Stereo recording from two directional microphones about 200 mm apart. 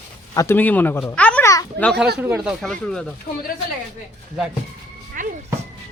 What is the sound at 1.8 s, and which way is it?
Speech, centre (ahead or behind).